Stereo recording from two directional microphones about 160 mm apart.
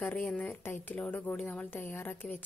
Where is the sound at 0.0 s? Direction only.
10° left (ahead or behind).